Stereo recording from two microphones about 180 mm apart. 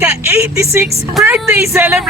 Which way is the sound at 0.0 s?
15° right (ahead or behind).